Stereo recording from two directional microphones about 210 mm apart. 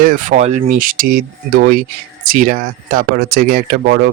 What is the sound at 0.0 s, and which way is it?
Speech, 40° right (ahead or behind).